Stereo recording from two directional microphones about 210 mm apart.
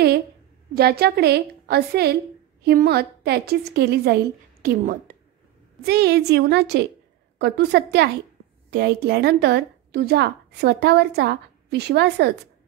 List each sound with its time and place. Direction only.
0.7 s a woman's voice: 50° right (ahead or behind)